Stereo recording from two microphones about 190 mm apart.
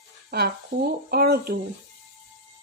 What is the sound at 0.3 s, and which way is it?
Dishes, 50° right (ahead or behind).